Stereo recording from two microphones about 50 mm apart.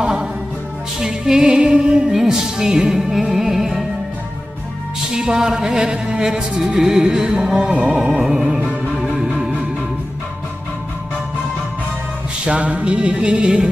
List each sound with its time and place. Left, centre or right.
0.0 s music: centre
5.1 s speech: centre
9.2 s music: centre
12.4 s music: right